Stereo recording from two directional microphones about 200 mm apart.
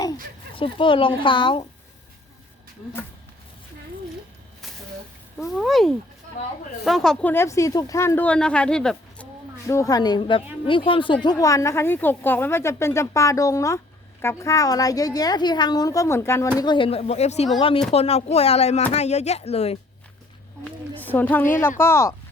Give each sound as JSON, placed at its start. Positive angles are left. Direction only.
{"t": 0.5, "sound": "speech", "side_deg": 25}
{"t": 5.4, "sound": "a woman's voice", "side_deg": 0}
{"t": 9.6, "sound": "a woman's voice", "side_deg": 15}
{"t": 16.6, "sound": "speech", "side_deg": 25}
{"t": 21.0, "sound": "a woman's voice", "side_deg": 10}